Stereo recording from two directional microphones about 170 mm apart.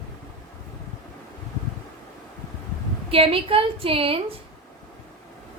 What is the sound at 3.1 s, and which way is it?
A woman's voice, 35° right (ahead or behind).